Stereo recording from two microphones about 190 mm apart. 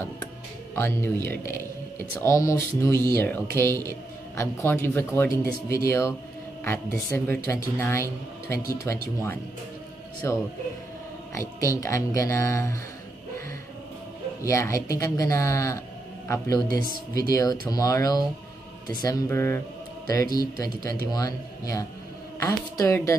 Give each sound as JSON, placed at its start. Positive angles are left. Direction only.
{"t": 0.7, "sound": "a man's voice", "side_deg": 10}
{"t": 10.2, "sound": "speech", "side_deg": 15}
{"t": 14.4, "sound": "speech", "side_deg": 15}
{"t": 16.6, "sound": "speech", "side_deg": -50}
{"t": 17.3, "sound": "speech", "side_deg": 20}